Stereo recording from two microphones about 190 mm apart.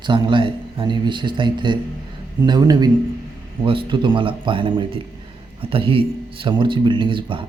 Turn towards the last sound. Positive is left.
turn(degrees=-25)  # may be behind; listen again after turning